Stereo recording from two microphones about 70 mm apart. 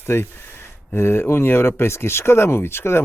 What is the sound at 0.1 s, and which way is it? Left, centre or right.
Speech, left.